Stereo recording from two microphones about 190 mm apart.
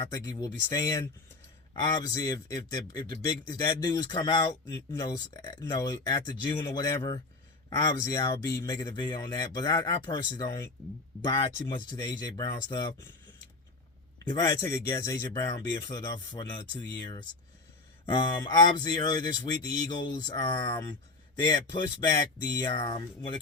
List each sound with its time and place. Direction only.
0.0 s speech: 20° left (ahead or behind)
14.3 s speech: 20° left (ahead or behind)